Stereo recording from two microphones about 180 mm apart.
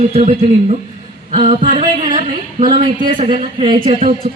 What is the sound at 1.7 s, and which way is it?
Music, 25° right (ahead or behind).